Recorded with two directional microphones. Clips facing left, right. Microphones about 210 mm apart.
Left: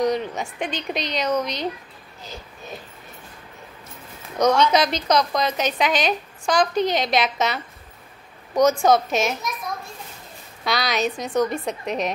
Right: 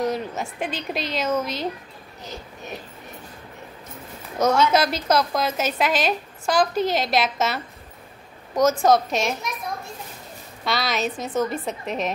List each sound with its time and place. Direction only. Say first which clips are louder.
0.0 s a woman's voice: left 3 dB; 5° right (ahead or behind)
4.4 s a woman's voice: left 1 dB; 5° right (ahead or behind)
10.6 s a woman's voice: left 2 dB; centre (ahead or behind)